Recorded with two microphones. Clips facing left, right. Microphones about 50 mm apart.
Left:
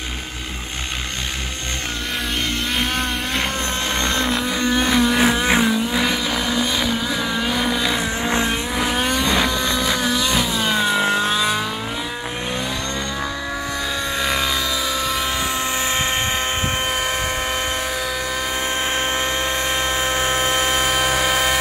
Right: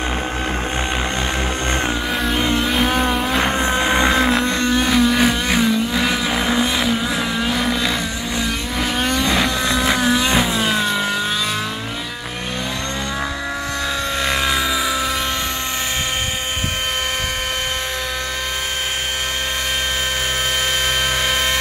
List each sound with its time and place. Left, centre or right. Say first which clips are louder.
2.5 s vehicle: right 5 dB; centre
4.2 s vehicle: right 4 dB; centre
4.6 s vehicle: right 1 dB; centre
6.3 s vehicle: right 3 dB; centre
6.8 s vehicle: right 2 dB; centre
8.9 s vehicle: right 2 dB; centre
9.3 s vehicle: right 1 dB; centre
10.6 s vehicle: even; centre
21.0 s a sound: left 1 dB; centre